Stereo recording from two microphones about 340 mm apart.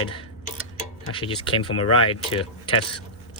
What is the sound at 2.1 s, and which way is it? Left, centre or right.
Speech, centre.